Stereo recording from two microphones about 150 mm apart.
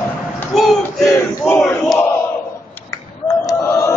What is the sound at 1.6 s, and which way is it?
Crowd, 5° left (ahead or behind).